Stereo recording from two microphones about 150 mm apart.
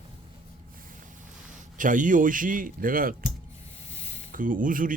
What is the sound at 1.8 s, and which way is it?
Speech, 60° right (ahead or behind).